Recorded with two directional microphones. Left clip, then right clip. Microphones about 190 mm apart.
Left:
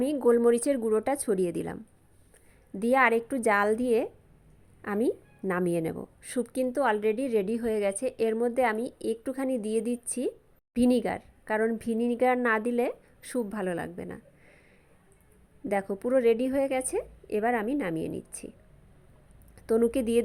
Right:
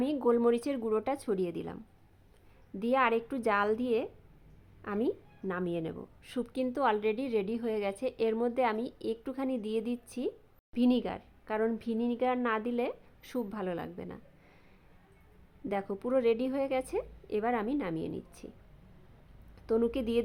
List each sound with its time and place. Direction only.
0.0 s a woman's voice: 15° left (ahead or behind)
15.7 s a woman's voice: 20° left (ahead or behind)
19.5 s a woman's voice: 20° left (ahead or behind)